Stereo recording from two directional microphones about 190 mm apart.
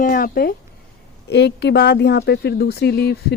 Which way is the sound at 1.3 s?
60° left (ahead or behind).